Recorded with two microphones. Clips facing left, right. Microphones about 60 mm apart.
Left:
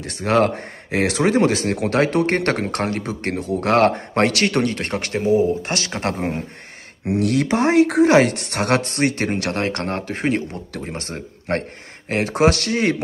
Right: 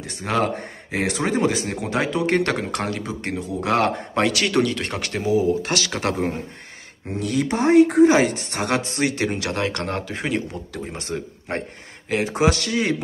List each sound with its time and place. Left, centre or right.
0.2 s speech: left
0.9 s speech: left
7.2 s speech: left
11.0 s speech: left